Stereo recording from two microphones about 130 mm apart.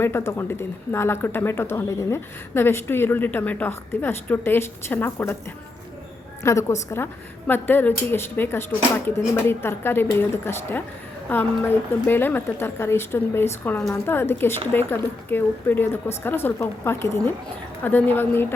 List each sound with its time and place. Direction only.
0.0 s a woman's voice: 20° left (ahead or behind)
6.4 s a woman's voice: 20° left (ahead or behind)